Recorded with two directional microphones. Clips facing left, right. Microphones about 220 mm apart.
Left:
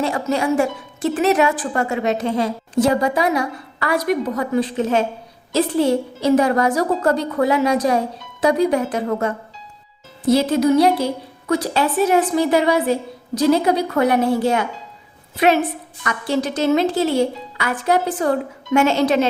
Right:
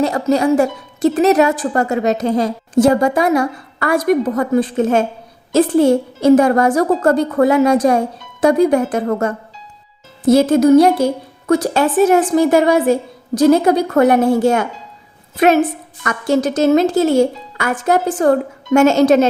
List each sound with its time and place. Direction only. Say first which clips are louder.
0.0 s a woman's voice: right 5 dB; 40° right (ahead or behind)